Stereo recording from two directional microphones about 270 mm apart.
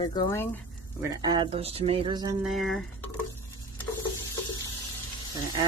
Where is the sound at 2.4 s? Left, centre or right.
Centre.